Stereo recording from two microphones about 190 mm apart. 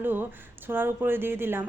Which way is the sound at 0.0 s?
10° right (ahead or behind).